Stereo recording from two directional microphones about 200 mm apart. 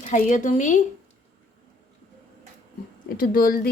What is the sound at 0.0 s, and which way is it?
Speech, 40° left (ahead or behind).